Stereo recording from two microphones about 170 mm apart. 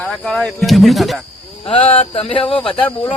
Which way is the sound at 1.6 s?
35° left (ahead or behind).